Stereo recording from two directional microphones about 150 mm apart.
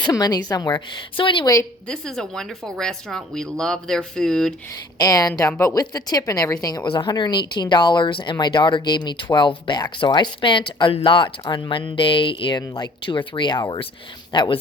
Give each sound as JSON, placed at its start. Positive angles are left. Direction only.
{"t": 0.0, "sound": "a woman's voice", "side_deg": 25}
{"t": 1.9, "sound": "speech", "side_deg": 5}
{"t": 4.9, "sound": "a woman's voice", "side_deg": 25}